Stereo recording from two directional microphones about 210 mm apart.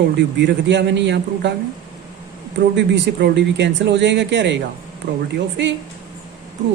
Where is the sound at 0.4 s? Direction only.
55° right (ahead or behind).